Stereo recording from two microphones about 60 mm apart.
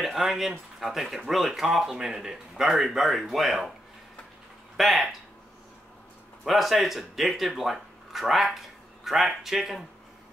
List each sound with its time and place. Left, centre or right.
0.0 s speech: centre
4.7 s speech: centre
6.4 s speech: centre